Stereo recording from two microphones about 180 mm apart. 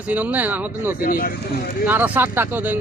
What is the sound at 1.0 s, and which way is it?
Speech, 55° left (ahead or behind).